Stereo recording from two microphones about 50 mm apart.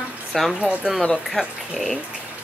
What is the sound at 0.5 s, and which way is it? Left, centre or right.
Speech, right.